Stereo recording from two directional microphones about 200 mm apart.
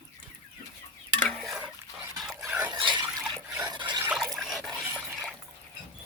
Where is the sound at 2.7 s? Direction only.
25° right (ahead or behind).